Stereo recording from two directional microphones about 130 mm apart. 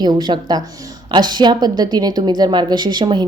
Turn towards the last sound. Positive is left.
turn(degrees=-35)  # may be behind; listen again after turning